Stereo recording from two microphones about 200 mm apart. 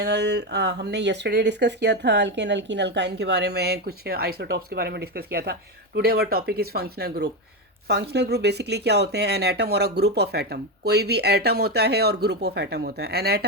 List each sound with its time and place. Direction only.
0.0 s speech: 55° right (ahead or behind)